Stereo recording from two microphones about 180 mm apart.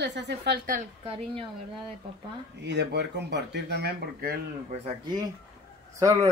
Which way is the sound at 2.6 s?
70° right (ahead or behind).